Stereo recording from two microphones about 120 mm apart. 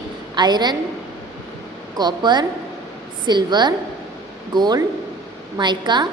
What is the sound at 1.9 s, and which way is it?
A woman's voice, 35° right (ahead or behind).